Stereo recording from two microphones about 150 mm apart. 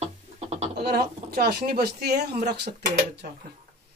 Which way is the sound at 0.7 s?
90° right.